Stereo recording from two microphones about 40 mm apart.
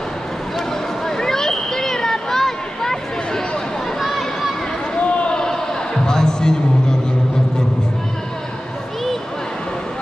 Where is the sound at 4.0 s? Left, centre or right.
Centre.